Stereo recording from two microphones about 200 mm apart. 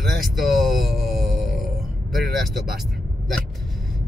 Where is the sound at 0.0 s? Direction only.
Centre (ahead or behind).